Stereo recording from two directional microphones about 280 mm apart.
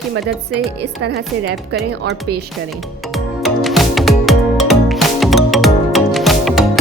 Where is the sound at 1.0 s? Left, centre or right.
Right.